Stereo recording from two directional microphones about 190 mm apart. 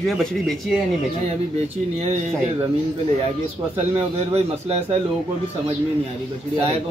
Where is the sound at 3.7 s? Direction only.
35° right (ahead or behind).